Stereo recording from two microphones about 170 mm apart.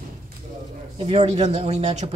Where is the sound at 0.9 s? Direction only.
35° right (ahead or behind).